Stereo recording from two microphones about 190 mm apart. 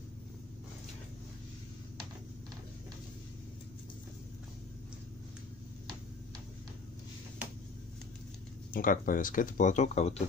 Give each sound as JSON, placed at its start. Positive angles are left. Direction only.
{"t": 8.7, "sound": "speech", "side_deg": 45}